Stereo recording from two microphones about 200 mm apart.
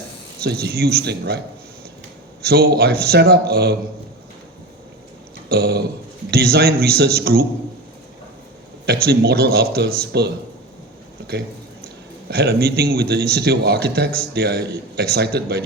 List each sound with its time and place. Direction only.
0.3 s a man's voice: 50° right (ahead or behind)
2.4 s a man's voice: 50° right (ahead or behind)
5.5 s a sound: 50° right (ahead or behind)
6.3 s a man's voice: 50° right (ahead or behind)
8.9 s a man's voice: 50° right (ahead or behind)
11.3 s a sound: 55° right (ahead or behind)
12.3 s a man's voice: 50° right (ahead or behind)